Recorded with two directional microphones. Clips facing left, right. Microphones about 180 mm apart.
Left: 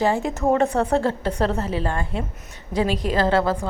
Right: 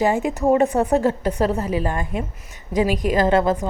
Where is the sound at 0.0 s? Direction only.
15° right (ahead or behind).